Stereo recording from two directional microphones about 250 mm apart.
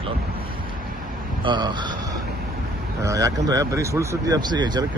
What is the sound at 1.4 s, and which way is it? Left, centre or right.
Speech, centre.